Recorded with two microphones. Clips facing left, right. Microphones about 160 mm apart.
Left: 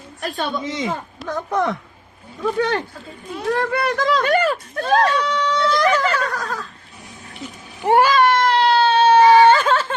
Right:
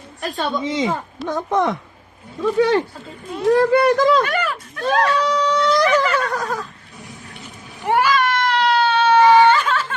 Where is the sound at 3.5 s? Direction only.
30° right (ahead or behind).